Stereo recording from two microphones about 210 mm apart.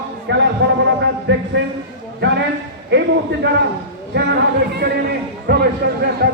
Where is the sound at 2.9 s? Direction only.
55° right (ahead or behind).